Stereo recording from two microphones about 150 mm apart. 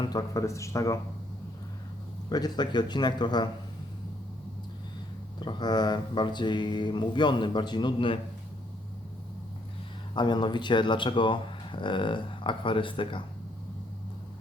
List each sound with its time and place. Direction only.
0.0 s a man's voice: 25° left (ahead or behind)
2.3 s a man's voice: 30° left (ahead or behind)
5.4 s speech: 30° left (ahead or behind)
10.2 s speech: 30° left (ahead or behind)